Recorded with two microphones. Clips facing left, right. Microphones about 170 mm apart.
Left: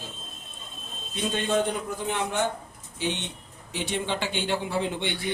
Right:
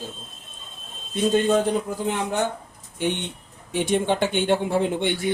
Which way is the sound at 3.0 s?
55° right (ahead or behind).